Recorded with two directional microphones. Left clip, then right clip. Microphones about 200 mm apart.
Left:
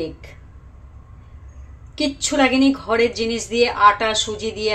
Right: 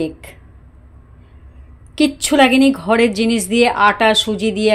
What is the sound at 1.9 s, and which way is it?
Speech, 50° right (ahead or behind).